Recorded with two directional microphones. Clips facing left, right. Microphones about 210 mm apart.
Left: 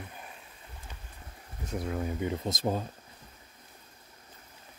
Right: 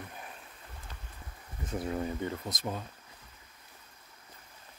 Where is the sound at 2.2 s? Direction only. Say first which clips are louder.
Left 5 dB; 25° left (ahead or behind).